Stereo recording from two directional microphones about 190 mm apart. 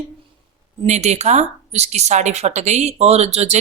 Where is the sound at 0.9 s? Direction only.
35° right (ahead or behind).